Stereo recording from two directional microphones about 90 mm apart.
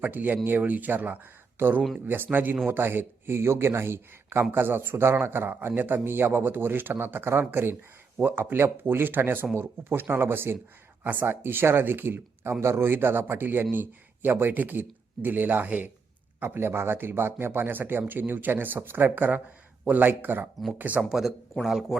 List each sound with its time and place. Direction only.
0.0 s speech: 20° right (ahead or behind)
21.0 s speech: centre (ahead or behind)